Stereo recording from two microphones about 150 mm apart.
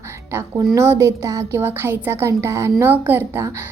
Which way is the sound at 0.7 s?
20° right (ahead or behind).